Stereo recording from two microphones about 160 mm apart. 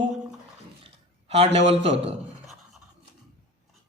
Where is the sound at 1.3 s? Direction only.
35° right (ahead or behind).